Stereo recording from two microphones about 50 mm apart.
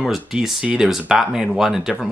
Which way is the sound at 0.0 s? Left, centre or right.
Centre.